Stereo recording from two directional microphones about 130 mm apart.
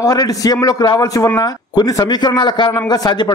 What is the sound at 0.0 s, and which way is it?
A man's voice, 30° left (ahead or behind).